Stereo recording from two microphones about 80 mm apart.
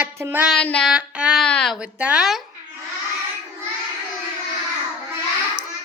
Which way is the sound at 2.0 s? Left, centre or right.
Centre.